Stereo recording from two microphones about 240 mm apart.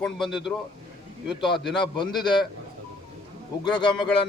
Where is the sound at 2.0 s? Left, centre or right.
Centre.